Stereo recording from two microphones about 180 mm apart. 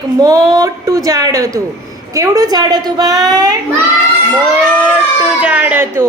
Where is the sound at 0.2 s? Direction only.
20° right (ahead or behind).